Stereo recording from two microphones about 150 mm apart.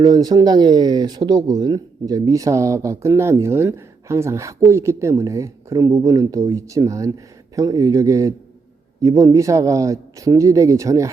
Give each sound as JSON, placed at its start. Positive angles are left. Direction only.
{"t": 0.0, "sound": "speech", "side_deg": -25}